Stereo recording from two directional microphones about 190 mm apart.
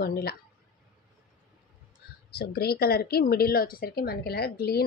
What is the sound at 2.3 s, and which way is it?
Speech, 55° left (ahead or behind).